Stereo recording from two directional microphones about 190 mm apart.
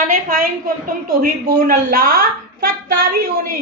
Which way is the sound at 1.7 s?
50° right (ahead or behind).